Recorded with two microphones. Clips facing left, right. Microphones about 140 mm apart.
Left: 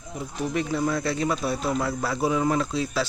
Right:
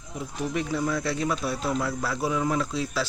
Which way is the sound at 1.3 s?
10° left (ahead or behind).